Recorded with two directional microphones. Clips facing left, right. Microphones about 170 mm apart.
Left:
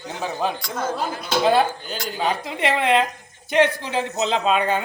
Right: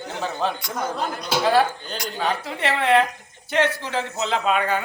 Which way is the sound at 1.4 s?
20° left (ahead or behind).